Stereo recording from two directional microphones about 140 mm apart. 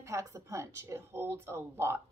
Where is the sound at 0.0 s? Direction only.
20° right (ahead or behind).